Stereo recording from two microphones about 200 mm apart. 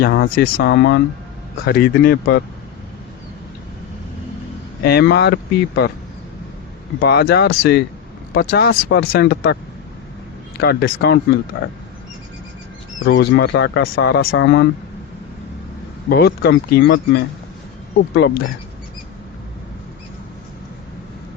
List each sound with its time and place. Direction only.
0.0 s speech: 50° left (ahead or behind)
0.6 s speech: 60° left (ahead or behind)
4.8 s speech: 55° left (ahead or behind)
7.0 s speech: 55° left (ahead or behind)
10.6 s speech: 50° left (ahead or behind)
13.1 s speech: 60° left (ahead or behind)
16.0 s speech: 55° left (ahead or behind)